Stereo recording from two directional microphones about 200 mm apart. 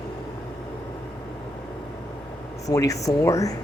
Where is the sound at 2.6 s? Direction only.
15° left (ahead or behind).